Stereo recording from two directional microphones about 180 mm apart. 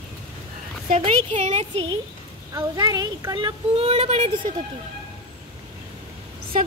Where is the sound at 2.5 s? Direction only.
20° right (ahead or behind); by 4.5 s 40° right (ahead or behind).